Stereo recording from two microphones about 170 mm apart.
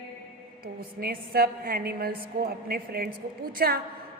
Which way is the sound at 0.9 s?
60° right (ahead or behind).